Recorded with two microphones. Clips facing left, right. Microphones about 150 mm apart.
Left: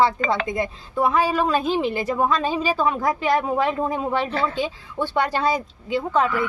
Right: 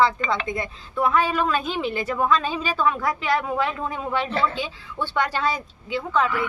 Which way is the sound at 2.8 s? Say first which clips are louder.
Right 1 dB; 20° left (ahead or behind).